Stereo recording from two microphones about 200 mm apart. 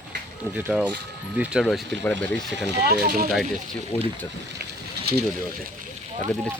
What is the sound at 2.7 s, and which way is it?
Speech, 50° right (ahead or behind).